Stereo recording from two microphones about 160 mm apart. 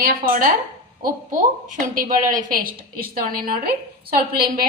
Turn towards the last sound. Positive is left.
turn(degrees=-65)  # may be behind; listen again after turning